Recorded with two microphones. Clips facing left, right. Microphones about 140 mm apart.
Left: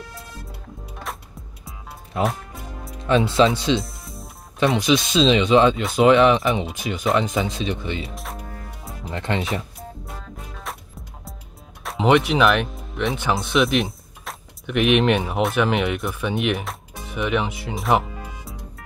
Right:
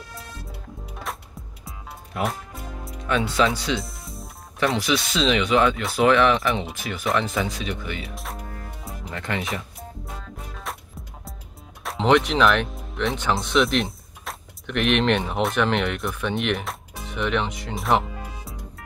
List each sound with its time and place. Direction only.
1.1 s music: centre (ahead or behind)
2.2 s music: centre (ahead or behind)
3.1 s speech: 25° left (ahead or behind)
3.8 s music: centre (ahead or behind)
4.7 s speech: 20° left (ahead or behind)
8.1 s music: centre (ahead or behind)
9.1 s speech: 30° left (ahead or behind)
9.5 s music: centre (ahead or behind)
11.8 s speech: 5° left (ahead or behind)